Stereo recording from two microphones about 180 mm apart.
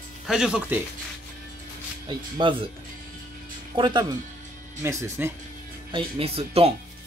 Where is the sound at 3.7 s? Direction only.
25° right (ahead or behind).